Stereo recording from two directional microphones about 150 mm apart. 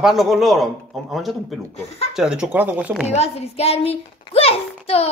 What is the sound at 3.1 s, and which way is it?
A child's voice, 45° left (ahead or behind).